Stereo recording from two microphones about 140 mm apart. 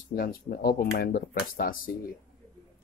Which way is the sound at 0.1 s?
90° left.